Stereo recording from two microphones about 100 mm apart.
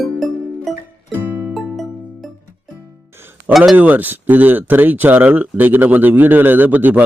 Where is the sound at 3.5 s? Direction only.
Centre (ahead or behind).